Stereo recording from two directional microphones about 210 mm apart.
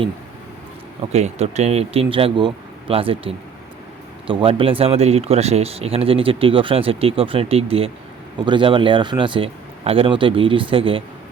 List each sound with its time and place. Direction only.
1.1 s speech: 30° right (ahead or behind)